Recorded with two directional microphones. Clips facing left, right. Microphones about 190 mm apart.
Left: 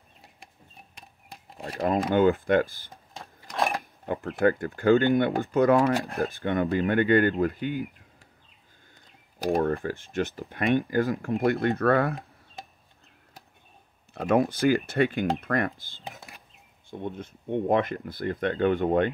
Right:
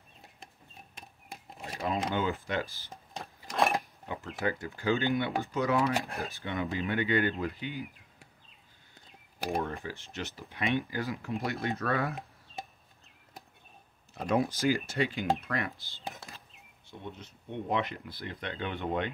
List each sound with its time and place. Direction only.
1.6 s speech: 50° left (ahead or behind)
2.9 s a sound: centre (ahead or behind)
4.0 s speech: 55° left (ahead or behind)
9.6 s speech: 55° left (ahead or behind)
14.1 s speech: 60° left (ahead or behind)